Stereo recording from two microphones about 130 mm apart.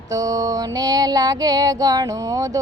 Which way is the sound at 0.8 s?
30° right (ahead or behind).